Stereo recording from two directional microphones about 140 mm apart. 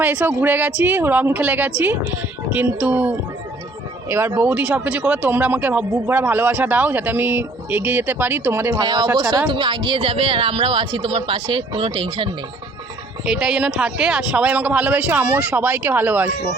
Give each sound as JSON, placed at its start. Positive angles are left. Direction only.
{"t": 0.0, "sound": "speech", "side_deg": -10}
{"t": 8.8, "sound": "speech", "side_deg": -30}
{"t": 13.2, "sound": "speech", "side_deg": -5}